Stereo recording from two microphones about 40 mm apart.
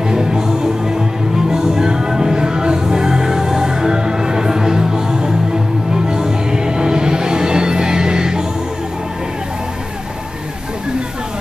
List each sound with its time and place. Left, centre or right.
0.1 s music: centre